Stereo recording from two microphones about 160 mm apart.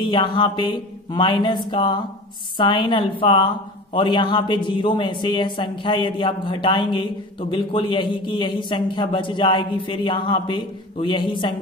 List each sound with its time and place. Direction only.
0.0 s a man's voice: 30° left (ahead or behind)